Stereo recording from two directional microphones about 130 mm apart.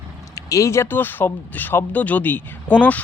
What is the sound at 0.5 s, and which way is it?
Speech, 25° left (ahead or behind).